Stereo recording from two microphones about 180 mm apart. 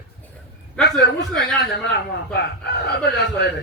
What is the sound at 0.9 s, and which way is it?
Speech, 70° left (ahead or behind).